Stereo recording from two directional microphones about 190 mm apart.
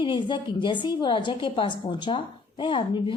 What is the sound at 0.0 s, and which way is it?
A woman's voice, 25° left (ahead or behind).